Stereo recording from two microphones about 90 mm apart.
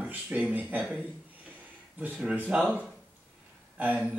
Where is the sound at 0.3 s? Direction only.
15° right (ahead or behind).